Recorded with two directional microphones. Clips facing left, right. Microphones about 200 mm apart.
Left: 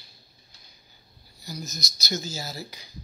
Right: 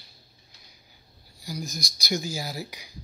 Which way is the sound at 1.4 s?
15° right (ahead or behind).